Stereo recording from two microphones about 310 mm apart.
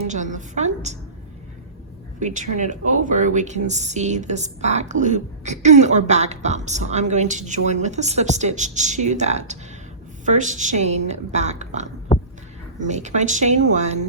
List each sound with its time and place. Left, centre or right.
0.1 s a woman's voice: right
2.1 s a woman's voice: right
12.1 s a sound: left
12.8 s a woman's voice: right